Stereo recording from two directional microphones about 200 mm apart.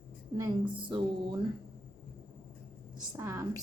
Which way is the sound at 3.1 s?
15° right (ahead or behind).